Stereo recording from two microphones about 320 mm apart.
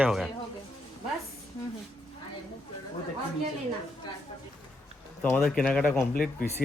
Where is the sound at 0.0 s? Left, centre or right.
Centre.